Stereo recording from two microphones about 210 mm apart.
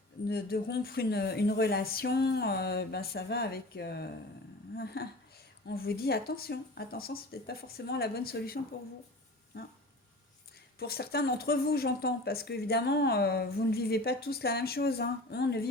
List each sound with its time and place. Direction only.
0.3 s speech: 50° left (ahead or behind)
10.8 s speech: 50° left (ahead or behind)